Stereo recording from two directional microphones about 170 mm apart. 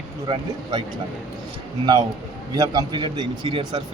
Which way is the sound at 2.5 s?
25° right (ahead or behind).